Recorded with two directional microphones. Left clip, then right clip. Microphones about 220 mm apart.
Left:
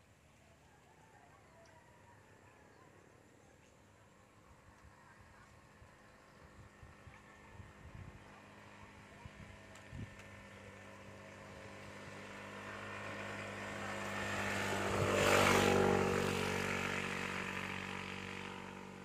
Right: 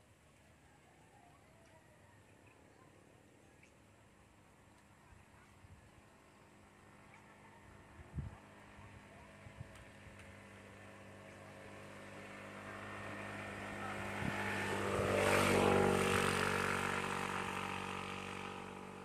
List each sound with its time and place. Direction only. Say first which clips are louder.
8.3 s vehicle: left 1 dB; 35° left (ahead or behind)
15.4 s vehicle: left 1 dB; 20° left (ahead or behind)
15.9 s vehicle: even; 15° right (ahead or behind)